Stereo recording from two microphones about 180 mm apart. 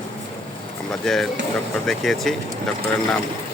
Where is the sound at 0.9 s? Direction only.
Centre (ahead or behind).